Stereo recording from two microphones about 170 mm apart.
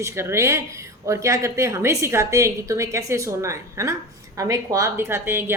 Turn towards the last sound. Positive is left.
turn(degrees=-15)  # may be behind; listen again after turning